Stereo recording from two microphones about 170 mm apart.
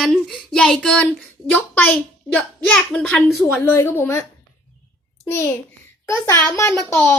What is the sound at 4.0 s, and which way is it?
Speech, 15° left (ahead or behind).